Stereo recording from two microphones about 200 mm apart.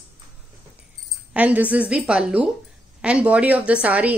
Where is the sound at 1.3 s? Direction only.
5° right (ahead or behind).